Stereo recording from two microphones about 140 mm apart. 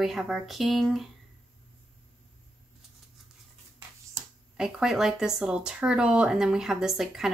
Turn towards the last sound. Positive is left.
turn(degrees=-5)  # may be behind; listen again after turning